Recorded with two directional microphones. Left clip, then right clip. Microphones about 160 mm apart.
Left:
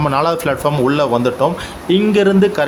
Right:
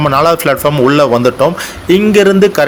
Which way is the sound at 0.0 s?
20° right (ahead or behind).